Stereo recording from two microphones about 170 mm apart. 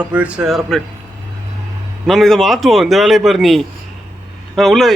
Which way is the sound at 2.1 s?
Centre (ahead or behind).